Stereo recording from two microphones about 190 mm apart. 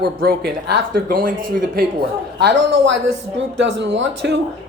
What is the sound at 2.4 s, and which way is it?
A woman's voice, 70° right (ahead or behind).